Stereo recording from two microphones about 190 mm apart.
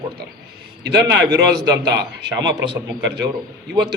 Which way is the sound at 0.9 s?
60° right (ahead or behind).